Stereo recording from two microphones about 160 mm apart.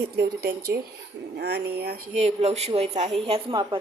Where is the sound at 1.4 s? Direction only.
90° right.